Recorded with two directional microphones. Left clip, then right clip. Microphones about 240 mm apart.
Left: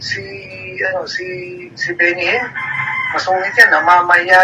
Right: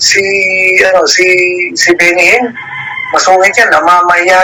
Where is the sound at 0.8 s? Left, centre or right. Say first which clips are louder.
Right 9 dB; right.